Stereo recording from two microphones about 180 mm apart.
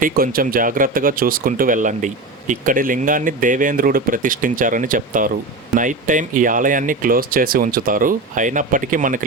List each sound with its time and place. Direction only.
0.0 s speech: 50° right (ahead or behind)